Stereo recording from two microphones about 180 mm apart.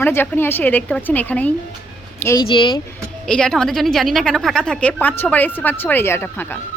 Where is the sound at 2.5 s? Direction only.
25° left (ahead or behind).